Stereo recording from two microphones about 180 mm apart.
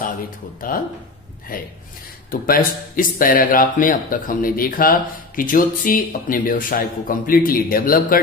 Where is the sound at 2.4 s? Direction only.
50° left (ahead or behind).